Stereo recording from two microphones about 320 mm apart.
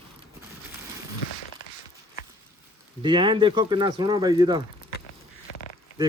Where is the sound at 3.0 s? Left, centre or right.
Centre.